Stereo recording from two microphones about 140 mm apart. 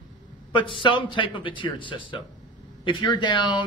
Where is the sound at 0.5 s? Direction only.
35° left (ahead or behind).